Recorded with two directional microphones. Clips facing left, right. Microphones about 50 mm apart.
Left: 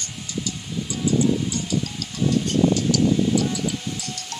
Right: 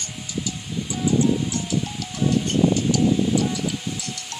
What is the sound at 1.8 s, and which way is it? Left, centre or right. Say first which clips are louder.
Music: right 1 dB; right.